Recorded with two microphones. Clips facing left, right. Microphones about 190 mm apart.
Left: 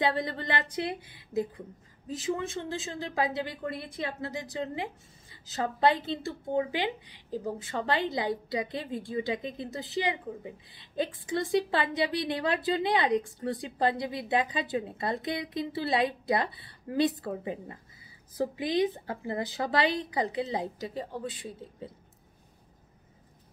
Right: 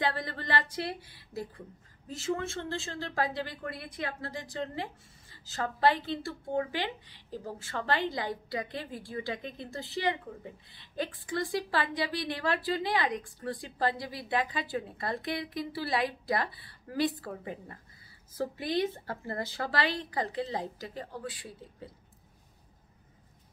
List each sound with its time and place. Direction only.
0.0 s a woman's voice: 20° left (ahead or behind)